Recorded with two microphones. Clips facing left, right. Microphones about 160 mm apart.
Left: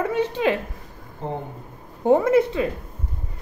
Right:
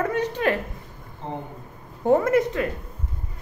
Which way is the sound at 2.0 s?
10° left (ahead or behind).